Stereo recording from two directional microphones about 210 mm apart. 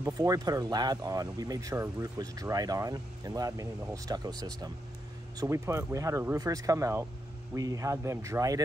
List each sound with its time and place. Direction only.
0.0 s speech: 15° right (ahead or behind)
5.4 s speech: 15° right (ahead or behind)